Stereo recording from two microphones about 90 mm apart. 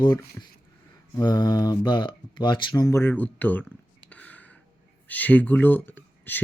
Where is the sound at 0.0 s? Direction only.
50° left (ahead or behind).